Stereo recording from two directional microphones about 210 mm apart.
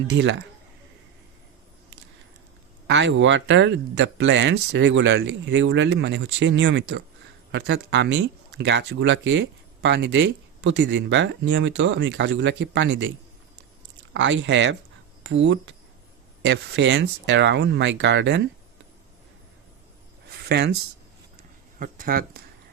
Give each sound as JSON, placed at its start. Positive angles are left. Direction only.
{"t": 0.1, "sound": "speech", "side_deg": -60}
{"t": 2.8, "sound": "speech", "side_deg": -60}
{"t": 20.4, "sound": "speech", "side_deg": -55}
{"t": 21.8, "sound": "speech", "side_deg": -40}